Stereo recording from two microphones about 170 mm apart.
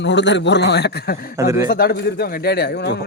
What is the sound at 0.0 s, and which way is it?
A man's voice, 90° left.